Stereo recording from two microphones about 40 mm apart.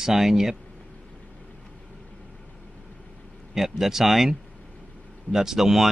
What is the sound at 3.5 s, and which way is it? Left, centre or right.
Speech, centre.